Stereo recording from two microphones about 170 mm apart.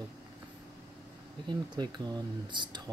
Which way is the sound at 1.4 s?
25° right (ahead or behind).